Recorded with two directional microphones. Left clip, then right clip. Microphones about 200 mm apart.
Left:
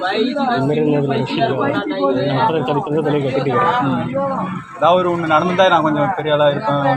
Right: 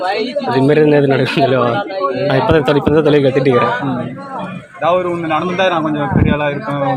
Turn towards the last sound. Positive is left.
turn(degrees=-5)  # may be behind; listen again after turning